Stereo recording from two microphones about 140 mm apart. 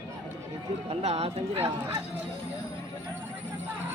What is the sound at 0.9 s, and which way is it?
Speech, 50° right (ahead or behind).